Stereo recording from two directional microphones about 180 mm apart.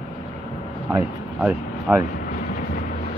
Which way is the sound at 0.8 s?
10° right (ahead or behind).